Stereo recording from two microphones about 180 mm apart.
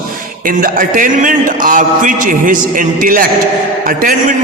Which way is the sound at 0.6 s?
50° right (ahead or behind).